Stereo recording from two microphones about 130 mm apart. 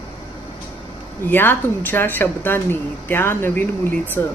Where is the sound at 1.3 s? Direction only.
15° left (ahead or behind).